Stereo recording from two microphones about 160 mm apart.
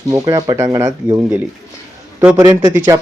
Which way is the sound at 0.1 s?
25° right (ahead or behind).